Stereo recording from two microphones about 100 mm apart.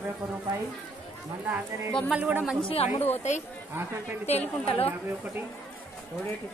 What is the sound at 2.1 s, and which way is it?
Speech, 10° right (ahead or behind).